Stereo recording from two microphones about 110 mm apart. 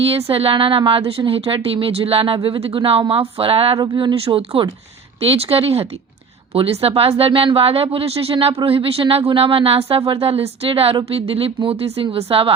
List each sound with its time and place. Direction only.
0.3 s a woman's voice: 60° right (ahead or behind)
5.2 s a woman's voice: 65° right (ahead or behind)